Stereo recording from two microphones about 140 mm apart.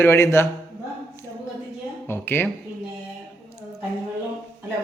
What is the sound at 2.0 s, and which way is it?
Speech, 15° left (ahead or behind).